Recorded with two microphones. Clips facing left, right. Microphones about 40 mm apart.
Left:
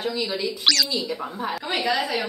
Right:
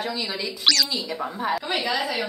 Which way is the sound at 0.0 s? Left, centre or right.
Centre.